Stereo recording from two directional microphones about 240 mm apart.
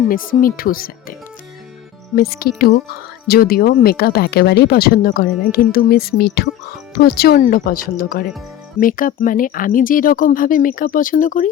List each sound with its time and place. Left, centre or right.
0.1 s speech: left
2.1 s speech: left